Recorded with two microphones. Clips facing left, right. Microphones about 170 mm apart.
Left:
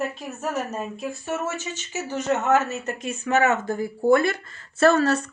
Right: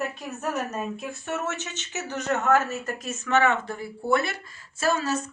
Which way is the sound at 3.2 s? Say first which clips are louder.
Left 2 dB; 40° left (ahead or behind).